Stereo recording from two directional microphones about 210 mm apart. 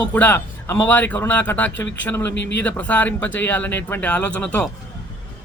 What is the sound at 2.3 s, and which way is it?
Speech, 55° left (ahead or behind).